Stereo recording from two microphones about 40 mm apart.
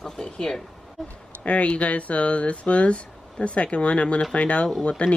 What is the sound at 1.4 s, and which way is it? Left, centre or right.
Speech, left.